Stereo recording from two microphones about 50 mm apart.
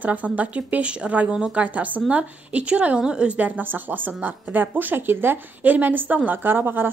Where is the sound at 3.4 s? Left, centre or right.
Right.